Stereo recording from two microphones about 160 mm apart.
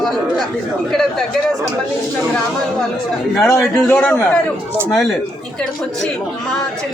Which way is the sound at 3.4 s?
20° left (ahead or behind).